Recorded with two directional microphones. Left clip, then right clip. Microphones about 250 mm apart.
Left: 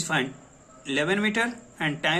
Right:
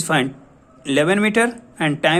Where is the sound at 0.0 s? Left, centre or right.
Right.